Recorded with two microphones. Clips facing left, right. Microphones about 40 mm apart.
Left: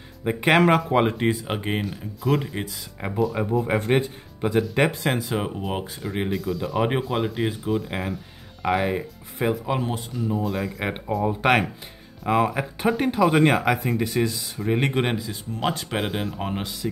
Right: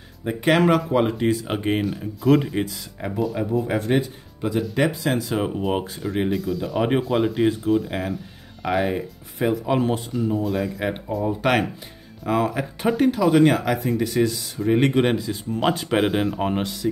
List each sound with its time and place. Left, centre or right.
0.2 s speech: centre
1.5 s speech: centre
3.6 s speech: left
5.5 s speech: centre
10.8 s speech: centre
16.8 s speech: centre